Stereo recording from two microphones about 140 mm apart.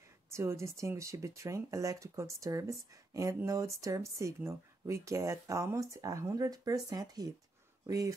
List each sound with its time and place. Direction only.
0.3 s speech: 20° right (ahead or behind)